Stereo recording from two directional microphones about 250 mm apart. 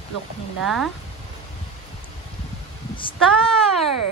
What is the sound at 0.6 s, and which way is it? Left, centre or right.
Speech, centre.